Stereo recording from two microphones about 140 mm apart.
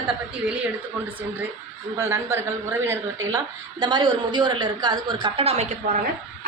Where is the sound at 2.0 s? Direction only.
20° right (ahead or behind).